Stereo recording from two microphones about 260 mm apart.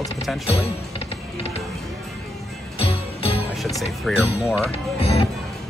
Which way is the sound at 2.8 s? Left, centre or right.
Left.